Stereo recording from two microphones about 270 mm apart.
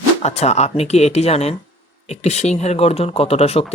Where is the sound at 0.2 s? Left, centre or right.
Left.